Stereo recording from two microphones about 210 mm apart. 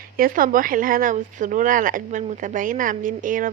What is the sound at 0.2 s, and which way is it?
Speech, 40° right (ahead or behind).